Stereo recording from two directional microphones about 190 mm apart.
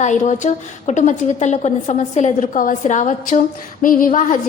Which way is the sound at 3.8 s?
45° left (ahead or behind).